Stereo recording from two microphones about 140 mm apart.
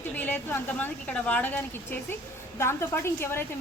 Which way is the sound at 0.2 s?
15° left (ahead or behind).